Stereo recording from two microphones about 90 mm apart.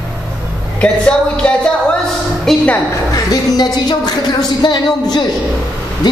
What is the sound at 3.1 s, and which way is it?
A woman's voice, 45° left (ahead or behind).